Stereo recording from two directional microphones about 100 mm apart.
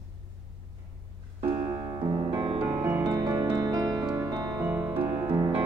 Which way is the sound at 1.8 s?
45° right (ahead or behind).